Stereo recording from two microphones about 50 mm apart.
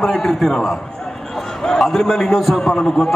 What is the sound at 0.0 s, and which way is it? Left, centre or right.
Speech, centre.